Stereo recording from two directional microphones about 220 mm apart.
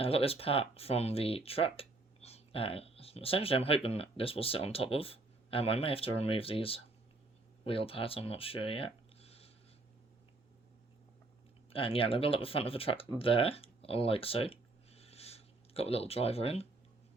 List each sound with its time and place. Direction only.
0.0 s speech: 25° left (ahead or behind)
11.7 s speech: 25° left (ahead or behind)